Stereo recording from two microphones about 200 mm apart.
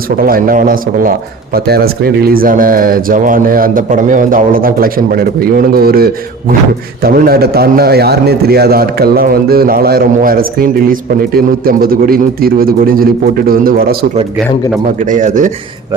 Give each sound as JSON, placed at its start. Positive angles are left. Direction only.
{"t": 0.2, "sound": "a man's voice", "side_deg": -45}
{"t": 14.9, "sound": "speech", "side_deg": -40}